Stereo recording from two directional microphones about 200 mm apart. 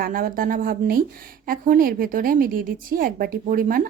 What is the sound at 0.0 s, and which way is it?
Speech, 45° right (ahead or behind).